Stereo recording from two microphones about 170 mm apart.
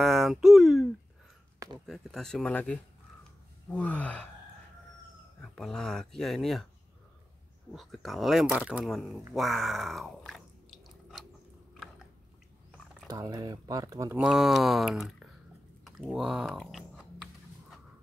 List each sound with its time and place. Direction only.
0.0 s speech: centre (ahead or behind)
1.9 s speech: centre (ahead or behind)
5.4 s speech: 5° left (ahead or behind)
7.7 s speech: centre (ahead or behind)
9.3 s chewing: centre (ahead or behind)
13.1 s speech: 25° right (ahead or behind)
14.2 s speech: 5° right (ahead or behind)
15.8 s typing: centre (ahead or behind)